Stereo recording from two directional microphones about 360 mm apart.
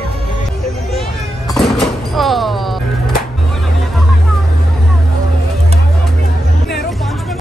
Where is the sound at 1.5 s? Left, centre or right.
Centre.